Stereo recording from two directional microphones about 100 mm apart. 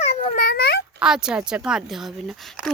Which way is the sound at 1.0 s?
5° right (ahead or behind).